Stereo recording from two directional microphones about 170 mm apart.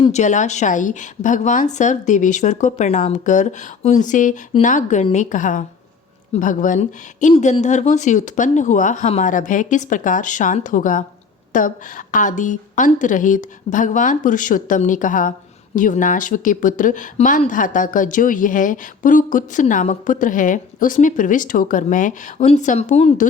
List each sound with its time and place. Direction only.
0.1 s a woman's voice: 45° left (ahead or behind)